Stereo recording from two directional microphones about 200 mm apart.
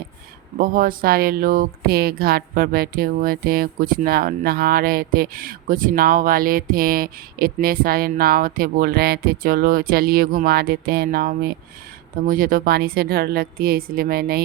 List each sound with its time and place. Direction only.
0.6 s speech: 45° right (ahead or behind)